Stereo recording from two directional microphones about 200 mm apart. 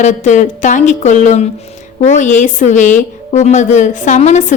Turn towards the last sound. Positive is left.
turn(degrees=35)  # may be behind; listen again after turning